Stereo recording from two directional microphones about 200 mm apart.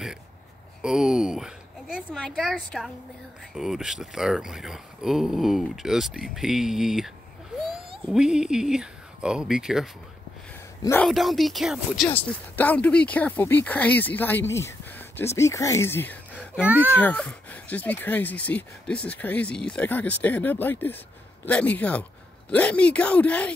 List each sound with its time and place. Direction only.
0.8 s a woman's voice: centre (ahead or behind)
8.1 s speech: 5° right (ahead or behind)
10.8 s speech: 10° left (ahead or behind)
11.1 s speech: centre (ahead or behind)
12.1 s speech: 10° left (ahead or behind)